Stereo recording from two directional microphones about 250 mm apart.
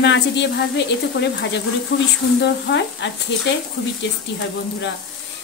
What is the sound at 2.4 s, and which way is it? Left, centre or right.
A woman's voice, left.